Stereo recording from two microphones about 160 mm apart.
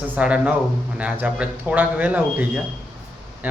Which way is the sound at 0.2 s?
5° right (ahead or behind).